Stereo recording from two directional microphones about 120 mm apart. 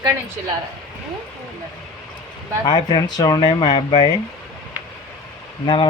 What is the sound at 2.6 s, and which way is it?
Speech, 35° left (ahead or behind).